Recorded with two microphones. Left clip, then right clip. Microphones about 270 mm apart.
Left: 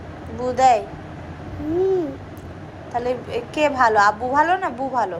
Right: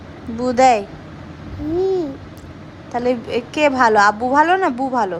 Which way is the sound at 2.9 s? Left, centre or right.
Centre.